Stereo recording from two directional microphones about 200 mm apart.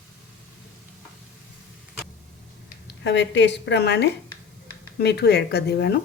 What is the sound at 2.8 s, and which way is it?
A woman's voice, 60° left (ahead or behind).